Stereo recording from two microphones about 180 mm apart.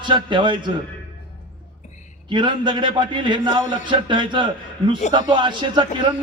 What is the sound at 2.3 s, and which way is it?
A man's voice, 25° right (ahead or behind).